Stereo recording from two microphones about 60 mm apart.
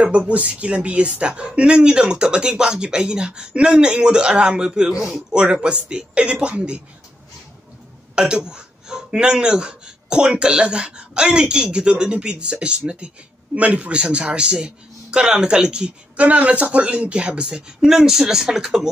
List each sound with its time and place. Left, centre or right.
0.0 s speech: centre
8.2 s speech: centre